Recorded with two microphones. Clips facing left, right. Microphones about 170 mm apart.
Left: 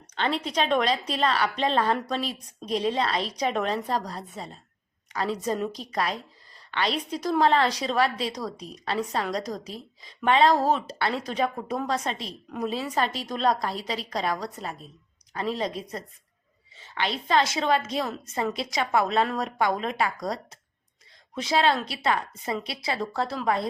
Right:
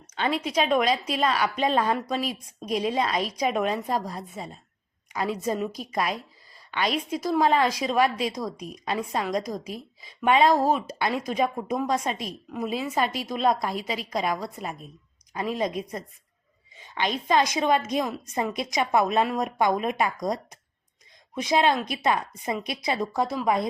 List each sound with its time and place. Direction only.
0.2 s a woman's voice: 10° right (ahead or behind)
16.8 s a woman's voice: 15° right (ahead or behind)